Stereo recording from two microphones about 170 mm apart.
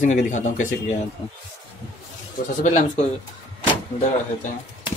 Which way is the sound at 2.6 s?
40° left (ahead or behind).